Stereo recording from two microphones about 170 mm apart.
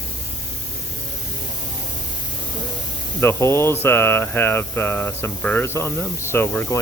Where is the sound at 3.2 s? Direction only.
15° left (ahead or behind).